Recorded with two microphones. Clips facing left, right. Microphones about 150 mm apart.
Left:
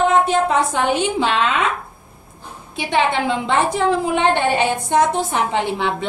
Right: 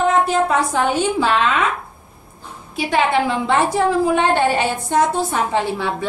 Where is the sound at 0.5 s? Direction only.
20° left (ahead or behind).